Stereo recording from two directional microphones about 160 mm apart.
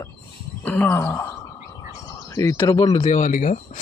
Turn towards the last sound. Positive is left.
turn(degrees=50)  # may be behind; listen again after turning